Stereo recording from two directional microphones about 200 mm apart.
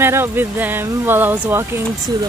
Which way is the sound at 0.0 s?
10° right (ahead or behind).